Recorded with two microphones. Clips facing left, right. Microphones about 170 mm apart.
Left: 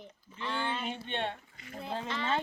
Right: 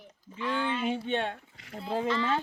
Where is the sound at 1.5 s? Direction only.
80° right.